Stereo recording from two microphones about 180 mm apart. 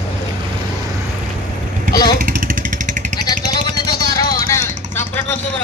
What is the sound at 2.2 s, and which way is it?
Motorcycle, 50° right (ahead or behind).